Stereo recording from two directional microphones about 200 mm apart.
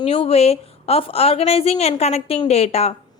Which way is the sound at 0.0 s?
30° left (ahead or behind).